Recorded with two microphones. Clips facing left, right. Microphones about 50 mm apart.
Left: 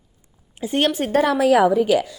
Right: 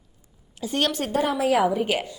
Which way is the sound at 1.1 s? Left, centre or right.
Left.